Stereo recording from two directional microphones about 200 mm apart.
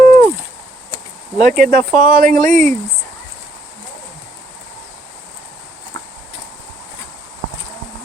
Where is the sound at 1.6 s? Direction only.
45° right (ahead or behind).